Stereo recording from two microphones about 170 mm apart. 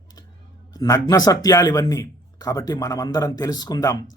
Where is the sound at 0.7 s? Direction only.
20° left (ahead or behind).